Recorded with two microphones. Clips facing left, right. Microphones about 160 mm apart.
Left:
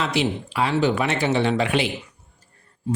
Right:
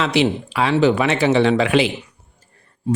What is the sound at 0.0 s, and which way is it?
Speech, 90° right.